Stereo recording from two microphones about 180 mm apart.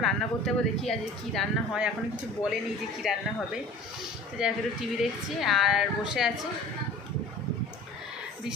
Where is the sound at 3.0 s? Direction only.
Centre (ahead or behind).